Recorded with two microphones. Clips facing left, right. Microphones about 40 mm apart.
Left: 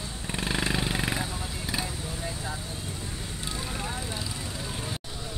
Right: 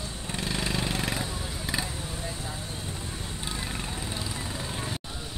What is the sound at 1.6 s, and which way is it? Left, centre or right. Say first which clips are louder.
Vehicle: right 1 dB; centre.